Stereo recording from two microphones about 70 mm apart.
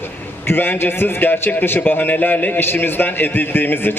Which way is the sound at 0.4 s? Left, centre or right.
Left.